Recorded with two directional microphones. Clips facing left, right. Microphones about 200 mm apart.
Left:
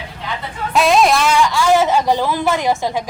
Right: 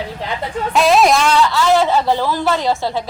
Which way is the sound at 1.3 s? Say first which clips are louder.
Even; 10° left (ahead or behind).